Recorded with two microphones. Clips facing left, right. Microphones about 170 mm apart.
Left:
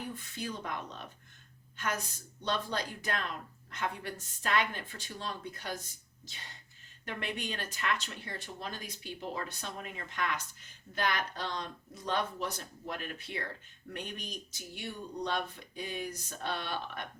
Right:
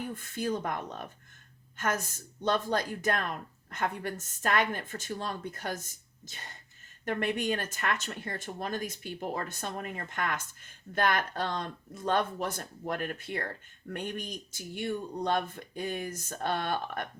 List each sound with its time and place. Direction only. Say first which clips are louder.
0.1 s speech: right 7 dB; 50° right (ahead or behind)